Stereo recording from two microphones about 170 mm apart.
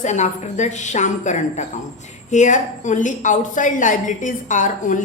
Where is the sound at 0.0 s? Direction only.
45° left (ahead or behind).